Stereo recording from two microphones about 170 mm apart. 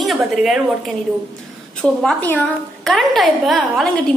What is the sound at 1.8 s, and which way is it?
A woman's voice, 5° left (ahead or behind).